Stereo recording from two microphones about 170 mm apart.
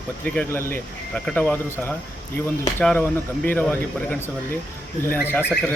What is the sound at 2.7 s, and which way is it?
Speech, 10° left (ahead or behind).